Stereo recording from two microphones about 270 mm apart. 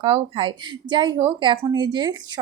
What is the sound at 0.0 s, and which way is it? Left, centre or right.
Speech, centre.